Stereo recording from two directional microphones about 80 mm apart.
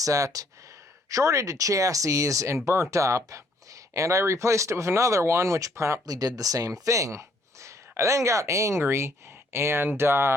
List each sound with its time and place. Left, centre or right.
0.0 s speech: right
6.1 s speech: right